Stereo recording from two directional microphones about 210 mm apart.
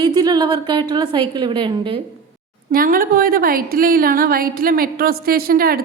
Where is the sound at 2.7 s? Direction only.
45° right (ahead or behind).